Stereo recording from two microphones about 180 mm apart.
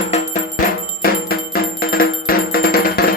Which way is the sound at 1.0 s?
55° left (ahead or behind).